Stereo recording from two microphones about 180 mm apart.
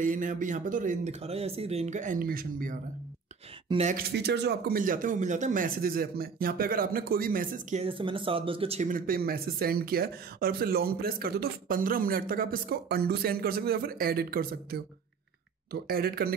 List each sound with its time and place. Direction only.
0.0 s speech: 45° right (ahead or behind)
3.6 s speech: 30° right (ahead or behind)
3.9 s speech: 65° right (ahead or behind); by 7.8 s 50° right (ahead or behind)
7.8 s speech: 30° right (ahead or behind)
8.8 s speech: 50° right (ahead or behind)